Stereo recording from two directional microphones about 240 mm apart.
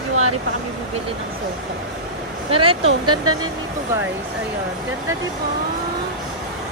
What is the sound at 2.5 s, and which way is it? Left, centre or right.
Speech, right.